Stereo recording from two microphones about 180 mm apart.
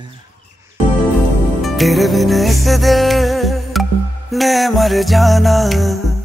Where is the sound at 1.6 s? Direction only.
Centre (ahead or behind).